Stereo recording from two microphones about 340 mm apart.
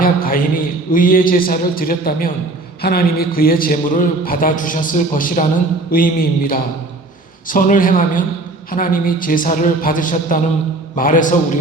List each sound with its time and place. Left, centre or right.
0.0 s a man's voice: left